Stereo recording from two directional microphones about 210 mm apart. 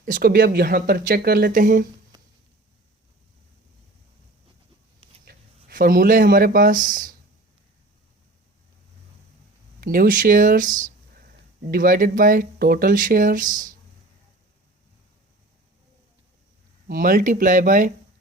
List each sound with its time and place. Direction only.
0.0 s speech: 45° right (ahead or behind)
5.6 s speech: 40° right (ahead or behind)
9.8 s speech: 45° right (ahead or behind)
16.9 s speech: 40° right (ahead or behind)